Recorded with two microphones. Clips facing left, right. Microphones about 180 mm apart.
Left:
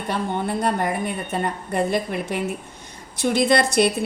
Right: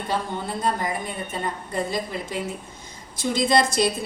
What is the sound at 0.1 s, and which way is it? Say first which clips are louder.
A woman's voice: left 4 dB; 65° left (ahead or behind).